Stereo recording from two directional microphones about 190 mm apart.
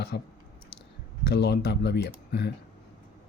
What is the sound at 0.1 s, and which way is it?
Speech, 65° left (ahead or behind).